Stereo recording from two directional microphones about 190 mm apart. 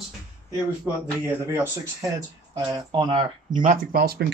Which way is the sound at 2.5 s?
20° right (ahead or behind).